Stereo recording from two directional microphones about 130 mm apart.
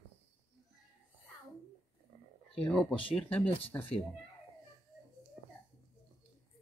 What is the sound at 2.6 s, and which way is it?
Speech, 5° left (ahead or behind).